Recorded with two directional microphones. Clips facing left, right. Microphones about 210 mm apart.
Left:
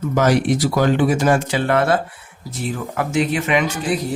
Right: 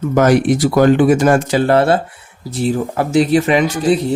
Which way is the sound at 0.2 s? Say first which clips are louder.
Right 5 dB; 50° right (ahead or behind).